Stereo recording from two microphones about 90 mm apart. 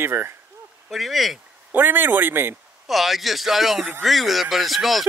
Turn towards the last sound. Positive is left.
turn(degrees=0)  # may be behind; listen again after turning